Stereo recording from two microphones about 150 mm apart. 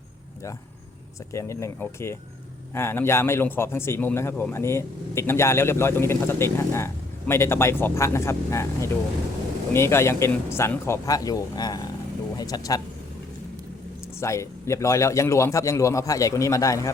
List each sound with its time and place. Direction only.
1.3 s a man's voice: 20° left (ahead or behind)
14.2 s a man's voice: 20° left (ahead or behind)